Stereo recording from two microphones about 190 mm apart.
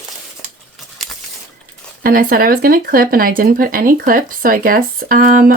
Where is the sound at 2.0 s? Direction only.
50° right (ahead or behind).